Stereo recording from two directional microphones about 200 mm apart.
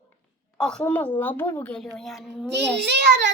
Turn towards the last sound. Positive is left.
turn(degrees=-60)  # may be behind; listen again after turning